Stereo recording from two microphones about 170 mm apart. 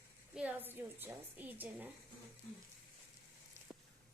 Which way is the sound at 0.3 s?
10° right (ahead or behind).